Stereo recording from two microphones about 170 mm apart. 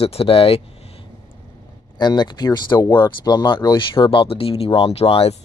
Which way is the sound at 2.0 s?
25° left (ahead or behind).